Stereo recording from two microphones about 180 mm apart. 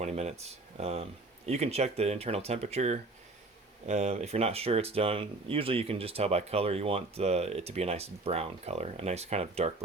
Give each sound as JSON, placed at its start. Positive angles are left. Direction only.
{"t": 0.0, "sound": "speech", "side_deg": -35}